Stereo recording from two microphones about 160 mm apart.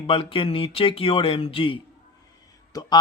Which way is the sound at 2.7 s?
25° left (ahead or behind).